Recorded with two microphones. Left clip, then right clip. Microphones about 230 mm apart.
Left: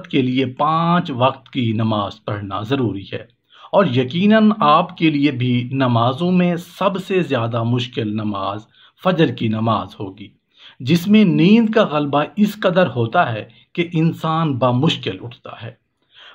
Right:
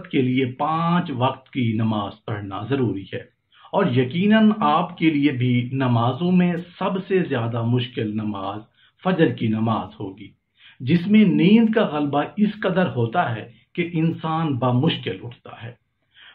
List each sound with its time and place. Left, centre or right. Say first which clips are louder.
0.0 s speech: left 3 dB; left